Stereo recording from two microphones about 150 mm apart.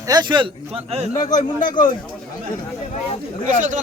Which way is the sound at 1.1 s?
25° left (ahead or behind).